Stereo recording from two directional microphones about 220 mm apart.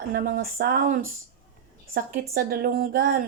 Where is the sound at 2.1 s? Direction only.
40° right (ahead or behind).